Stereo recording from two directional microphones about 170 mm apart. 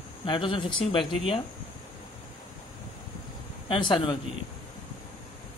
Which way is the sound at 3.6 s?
30° left (ahead or behind).